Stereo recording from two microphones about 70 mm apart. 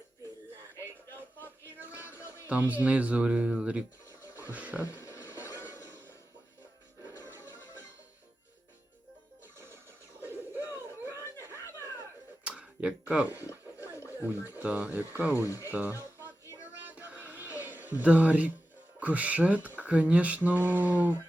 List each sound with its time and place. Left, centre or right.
1.8 s music: right
2.5 s speech: right
4.9 s a sound: left
10.2 s bird: right
10.7 s a sound: right
11.1 s chuckle: left
12.5 s a sound: centre
13.7 s a sound: left
14.3 s speech: left
14.6 s speech: right
15.4 s speech: left
16.8 s music: right
18.9 s speech: right